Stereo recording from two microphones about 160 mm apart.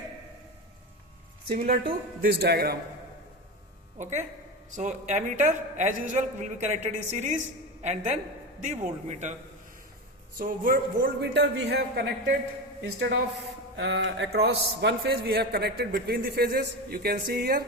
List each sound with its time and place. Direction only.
1.5 s speech: 65° right (ahead or behind)
2.2 s a man's voice: 80° right
3.9 s a man's voice: 50° right (ahead or behind)
10.3 s a man's voice: 60° right (ahead or behind); by 12.3 s 90° right
13.7 s a man's voice: 90° right; by 17.7 s 70° right (ahead or behind)